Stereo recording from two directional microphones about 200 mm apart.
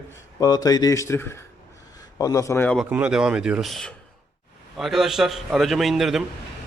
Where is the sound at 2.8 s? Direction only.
10° right (ahead or behind).